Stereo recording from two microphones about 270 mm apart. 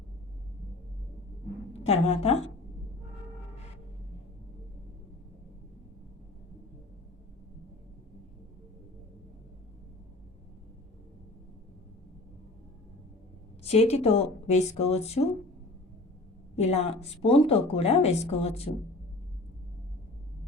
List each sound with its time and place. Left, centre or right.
1.8 s speech: left
13.6 s speech: left
16.7 s speech: left